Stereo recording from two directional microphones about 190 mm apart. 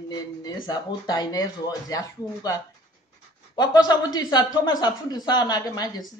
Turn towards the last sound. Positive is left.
turn(degrees=20)  # may be behind; listen again after turning